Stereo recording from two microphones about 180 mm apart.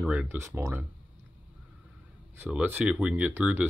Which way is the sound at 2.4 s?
10° right (ahead or behind).